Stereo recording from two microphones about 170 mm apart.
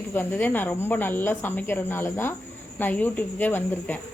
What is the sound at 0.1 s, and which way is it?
Speech, 10° left (ahead or behind).